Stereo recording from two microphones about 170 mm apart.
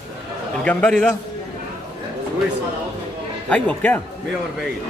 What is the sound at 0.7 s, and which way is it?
Speech, 5° left (ahead or behind).